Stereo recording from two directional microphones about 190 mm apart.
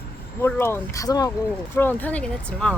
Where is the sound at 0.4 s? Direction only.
15° left (ahead or behind).